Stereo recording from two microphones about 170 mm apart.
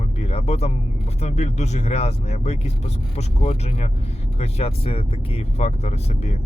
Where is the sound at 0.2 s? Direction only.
40° left (ahead or behind).